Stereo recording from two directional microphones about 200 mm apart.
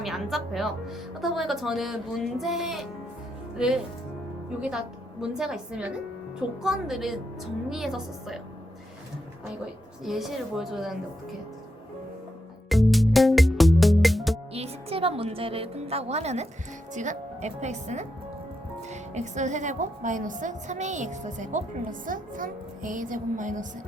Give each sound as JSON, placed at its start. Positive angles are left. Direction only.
{"t": 0.0, "sound": "speech", "side_deg": 0}
{"t": 10.0, "sound": "speech", "side_deg": 0}
{"t": 12.6, "sound": "music", "side_deg": 0}
{"t": 14.5, "sound": "a woman's voice", "side_deg": -30}